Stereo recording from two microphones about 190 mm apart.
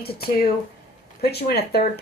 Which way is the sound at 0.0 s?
55° left (ahead or behind).